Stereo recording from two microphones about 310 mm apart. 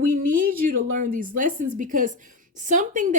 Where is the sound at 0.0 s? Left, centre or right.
Right.